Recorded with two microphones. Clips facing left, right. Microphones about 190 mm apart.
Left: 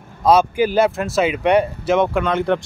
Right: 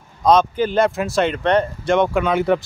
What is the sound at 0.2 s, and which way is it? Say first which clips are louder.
Speech: left 1 dB; 10° left (ahead or behind).